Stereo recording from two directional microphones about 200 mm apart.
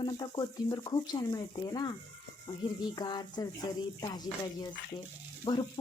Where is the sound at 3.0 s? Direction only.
20° left (ahead or behind).